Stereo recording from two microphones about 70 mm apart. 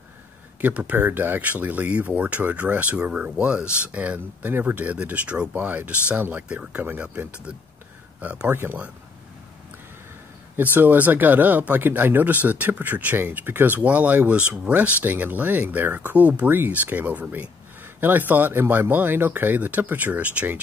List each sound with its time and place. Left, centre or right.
0.6 s speech: right
8.5 s speech: right
10.5 s speech: right